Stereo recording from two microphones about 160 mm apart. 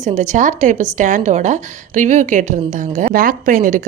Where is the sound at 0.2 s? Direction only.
50° right (ahead or behind).